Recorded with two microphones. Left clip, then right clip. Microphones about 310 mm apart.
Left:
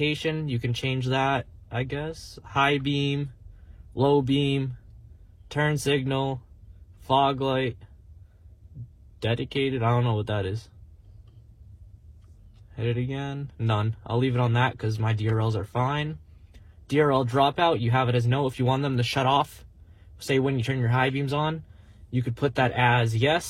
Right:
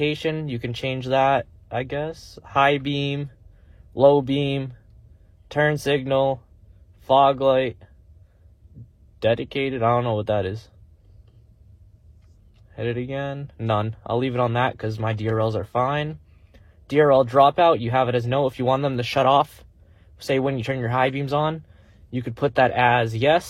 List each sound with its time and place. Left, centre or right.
0.0 s speech: right
9.2 s speech: right
12.7 s speech: right